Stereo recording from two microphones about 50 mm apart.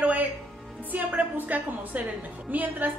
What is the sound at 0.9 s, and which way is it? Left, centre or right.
A woman's voice, right.